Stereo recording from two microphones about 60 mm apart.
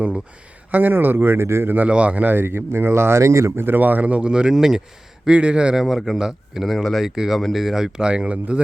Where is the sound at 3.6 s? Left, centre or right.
Right.